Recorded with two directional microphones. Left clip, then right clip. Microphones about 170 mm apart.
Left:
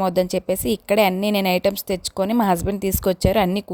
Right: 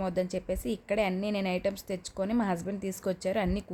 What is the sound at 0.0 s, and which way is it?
A woman's voice, 50° left (ahead or behind).